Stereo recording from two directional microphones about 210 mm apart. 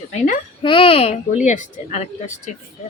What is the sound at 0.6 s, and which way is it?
Speech, 25° left (ahead or behind).